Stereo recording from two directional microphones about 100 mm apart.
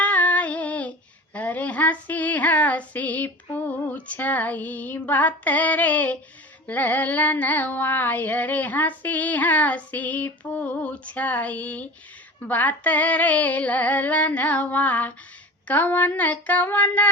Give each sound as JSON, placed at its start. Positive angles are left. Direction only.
{"t": 0.0, "sound": "child singing", "side_deg": 15}
{"t": 6.7, "sound": "female singing", "side_deg": 15}